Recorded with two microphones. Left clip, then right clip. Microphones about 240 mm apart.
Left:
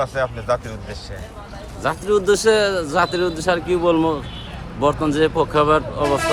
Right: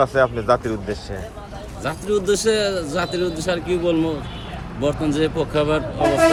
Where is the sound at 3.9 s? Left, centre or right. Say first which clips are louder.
Left 3 dB; left.